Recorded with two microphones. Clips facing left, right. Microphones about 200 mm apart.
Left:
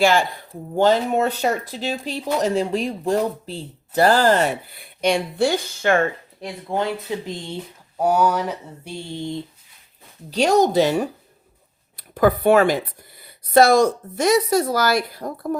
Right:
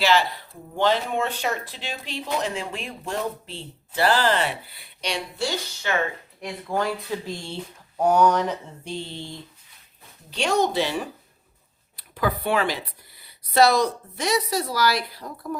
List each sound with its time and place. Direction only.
0.0 s speech: 50° left (ahead or behind)
6.4 s speech: 25° left (ahead or behind)
10.2 s speech: 40° left (ahead or behind)